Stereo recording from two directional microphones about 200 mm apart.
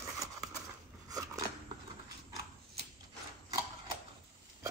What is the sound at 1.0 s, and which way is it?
Biting, 15° right (ahead or behind).